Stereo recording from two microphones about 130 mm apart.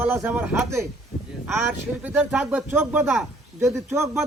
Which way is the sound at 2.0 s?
5° right (ahead or behind).